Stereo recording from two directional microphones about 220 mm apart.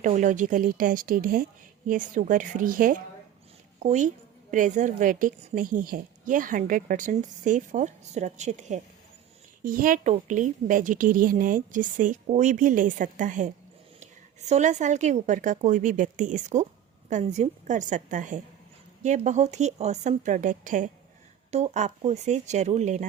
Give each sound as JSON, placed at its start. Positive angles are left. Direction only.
{"t": 0.0, "sound": "a woman's voice", "side_deg": -35}